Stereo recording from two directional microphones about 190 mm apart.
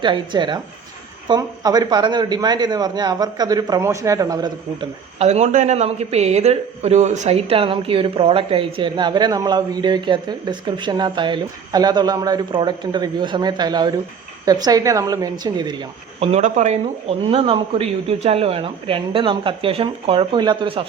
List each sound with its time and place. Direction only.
0.0 s speech: 25° right (ahead or behind)
5.2 s speech: 35° right (ahead or behind)